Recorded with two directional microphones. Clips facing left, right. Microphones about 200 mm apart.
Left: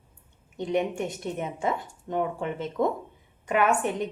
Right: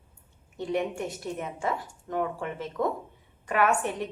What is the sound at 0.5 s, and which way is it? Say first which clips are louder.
A woman's voice: left 2 dB; 20° left (ahead or behind).